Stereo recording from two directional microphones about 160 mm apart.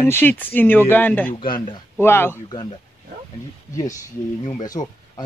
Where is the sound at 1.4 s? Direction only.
30° left (ahead or behind).